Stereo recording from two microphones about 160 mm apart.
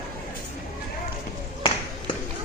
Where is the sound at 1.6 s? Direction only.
35° left (ahead or behind).